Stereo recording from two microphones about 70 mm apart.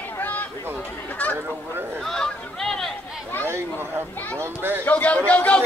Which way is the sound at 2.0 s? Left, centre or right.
Centre.